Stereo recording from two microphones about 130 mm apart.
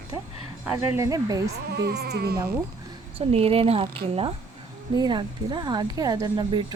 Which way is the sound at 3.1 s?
50° right (ahead or behind).